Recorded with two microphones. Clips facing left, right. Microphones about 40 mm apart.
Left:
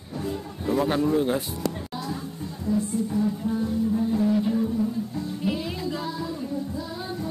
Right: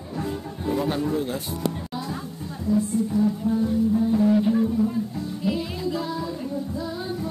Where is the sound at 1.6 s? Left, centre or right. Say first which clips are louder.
Right 2 dB; centre.